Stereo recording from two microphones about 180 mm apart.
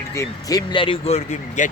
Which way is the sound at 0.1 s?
15° left (ahead or behind).